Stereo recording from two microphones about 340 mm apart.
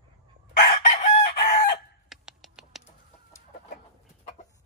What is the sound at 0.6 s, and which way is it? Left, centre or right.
Chicken, left.